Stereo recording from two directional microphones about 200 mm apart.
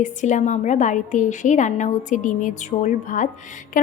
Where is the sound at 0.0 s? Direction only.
40° left (ahead or behind).